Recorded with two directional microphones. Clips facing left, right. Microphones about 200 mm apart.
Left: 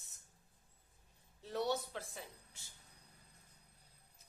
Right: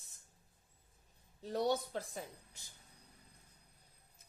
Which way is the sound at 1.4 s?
35° right (ahead or behind).